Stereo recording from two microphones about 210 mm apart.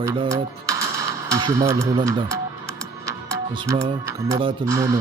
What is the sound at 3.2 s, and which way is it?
Speech, 20° right (ahead or behind).